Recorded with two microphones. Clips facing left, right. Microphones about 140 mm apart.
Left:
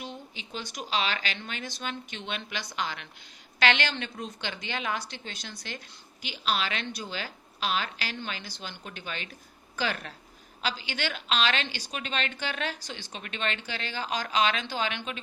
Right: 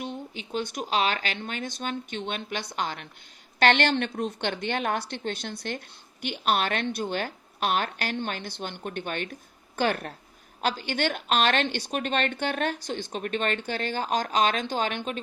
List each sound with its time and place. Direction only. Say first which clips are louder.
0.0 s a woman's voice: right 6 dB; 50° right (ahead or behind)